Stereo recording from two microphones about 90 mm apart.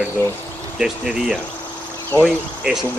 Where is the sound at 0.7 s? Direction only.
5° right (ahead or behind).